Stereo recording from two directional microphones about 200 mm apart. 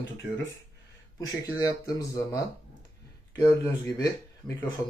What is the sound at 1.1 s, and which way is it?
Speech, 20° left (ahead or behind).